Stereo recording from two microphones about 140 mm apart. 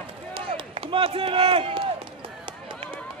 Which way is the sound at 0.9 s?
40° right (ahead or behind).